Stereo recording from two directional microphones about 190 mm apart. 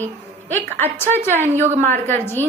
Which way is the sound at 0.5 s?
10° left (ahead or behind).